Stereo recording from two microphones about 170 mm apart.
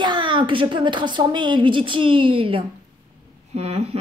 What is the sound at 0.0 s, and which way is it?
A woman's voice, 25° right (ahead or behind).